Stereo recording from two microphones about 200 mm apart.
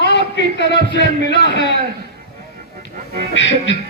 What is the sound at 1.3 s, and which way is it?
Speech, 55° left (ahead or behind).